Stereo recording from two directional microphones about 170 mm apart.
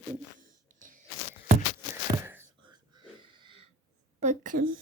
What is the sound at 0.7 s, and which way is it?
Crunch, 50° right (ahead or behind).